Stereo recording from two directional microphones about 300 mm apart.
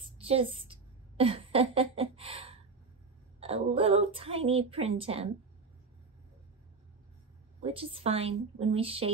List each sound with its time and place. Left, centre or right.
0.0 s a sound: centre
4.5 s a woman's voice: centre
7.6 s a woman's voice: centre